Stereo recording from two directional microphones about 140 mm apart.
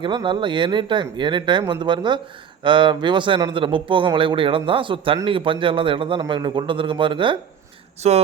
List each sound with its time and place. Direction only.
0.0 s speech: 35° right (ahead or behind)
8.0 s speech: 50° right (ahead or behind)